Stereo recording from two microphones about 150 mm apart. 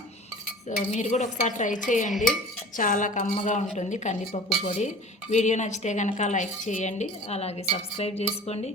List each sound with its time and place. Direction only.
0.9 s a woman's voice: 50° left (ahead or behind)
4.3 s speech: 40° left (ahead or behind)
5.3 s speech: 50° left (ahead or behind)